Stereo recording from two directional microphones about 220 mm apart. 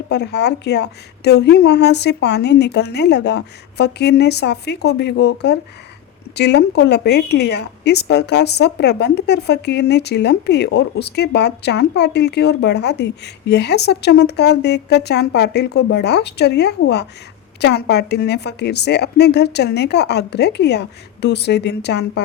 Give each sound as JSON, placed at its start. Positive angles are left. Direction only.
{"t": 0.1, "sound": "a woman's voice", "side_deg": 50}